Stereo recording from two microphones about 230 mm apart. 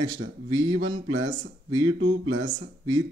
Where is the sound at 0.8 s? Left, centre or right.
Right.